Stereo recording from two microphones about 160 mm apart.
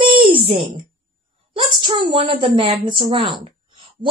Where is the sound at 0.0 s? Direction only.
35° right (ahead or behind).